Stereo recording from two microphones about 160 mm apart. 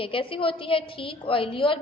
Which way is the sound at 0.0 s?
35° left (ahead or behind).